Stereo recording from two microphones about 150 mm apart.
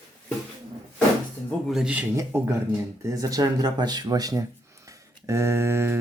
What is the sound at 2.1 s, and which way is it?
Speech, 20° right (ahead or behind).